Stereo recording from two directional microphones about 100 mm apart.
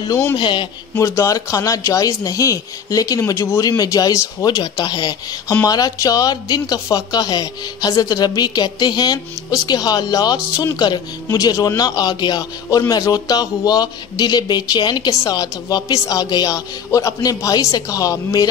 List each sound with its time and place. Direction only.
0.4 s a man's voice: 50° left (ahead or behind)
0.9 s a man's voice: 30° left (ahead or behind)